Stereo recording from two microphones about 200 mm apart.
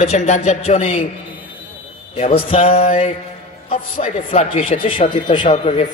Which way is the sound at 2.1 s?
30° left (ahead or behind).